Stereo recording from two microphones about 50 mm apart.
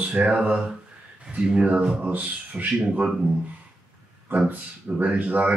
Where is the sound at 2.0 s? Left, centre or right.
Right.